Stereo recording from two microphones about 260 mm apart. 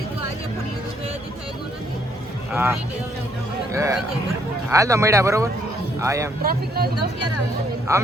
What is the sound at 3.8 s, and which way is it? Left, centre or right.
Speech, centre.